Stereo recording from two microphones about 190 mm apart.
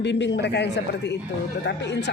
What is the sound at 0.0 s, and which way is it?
A man's voice, 65° left (ahead or behind).